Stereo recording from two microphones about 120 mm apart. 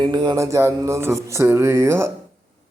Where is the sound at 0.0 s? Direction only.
40° right (ahead or behind).